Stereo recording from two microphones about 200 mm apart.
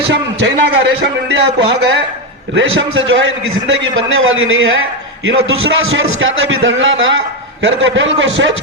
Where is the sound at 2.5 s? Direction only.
70° right (ahead or behind).